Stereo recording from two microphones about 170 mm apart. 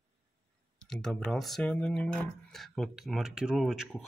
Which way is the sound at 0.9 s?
5° left (ahead or behind).